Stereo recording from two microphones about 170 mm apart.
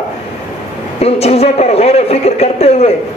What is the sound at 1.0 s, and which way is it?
A man's voice, 35° left (ahead or behind).